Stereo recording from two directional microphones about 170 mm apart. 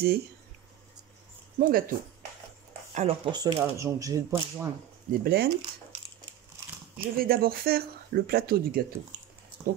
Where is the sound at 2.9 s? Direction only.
40° right (ahead or behind).